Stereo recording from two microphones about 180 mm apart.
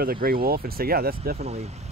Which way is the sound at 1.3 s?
35° right (ahead or behind).